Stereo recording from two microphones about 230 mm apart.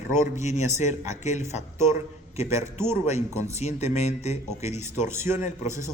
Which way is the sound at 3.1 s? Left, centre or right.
Left.